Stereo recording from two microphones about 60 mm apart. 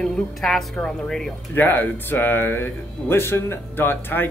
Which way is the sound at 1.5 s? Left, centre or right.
Left.